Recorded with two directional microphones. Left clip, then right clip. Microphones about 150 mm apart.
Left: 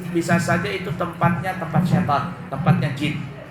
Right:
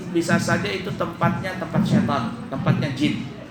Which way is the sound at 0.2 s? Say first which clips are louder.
Left 1 dB; 30° right (ahead or behind).